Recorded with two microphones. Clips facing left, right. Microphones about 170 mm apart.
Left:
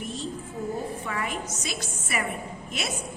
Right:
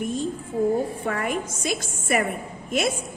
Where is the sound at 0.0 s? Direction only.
50° right (ahead or behind).